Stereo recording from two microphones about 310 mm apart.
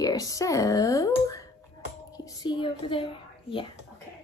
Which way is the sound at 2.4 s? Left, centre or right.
Centre.